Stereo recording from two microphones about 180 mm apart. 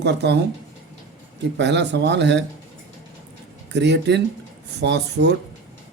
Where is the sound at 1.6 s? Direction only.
75° right (ahead or behind).